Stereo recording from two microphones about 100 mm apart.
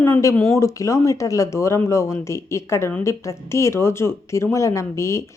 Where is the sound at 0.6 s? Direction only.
30° left (ahead or behind).